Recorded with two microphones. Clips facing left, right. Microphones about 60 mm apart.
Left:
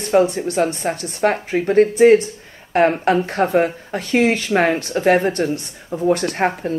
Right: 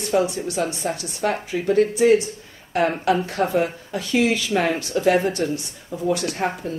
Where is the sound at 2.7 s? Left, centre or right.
Left.